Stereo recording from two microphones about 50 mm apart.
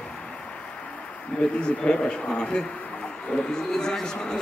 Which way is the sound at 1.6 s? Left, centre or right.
Centre.